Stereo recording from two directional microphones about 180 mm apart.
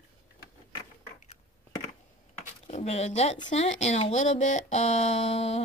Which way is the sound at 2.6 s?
35° left (ahead or behind).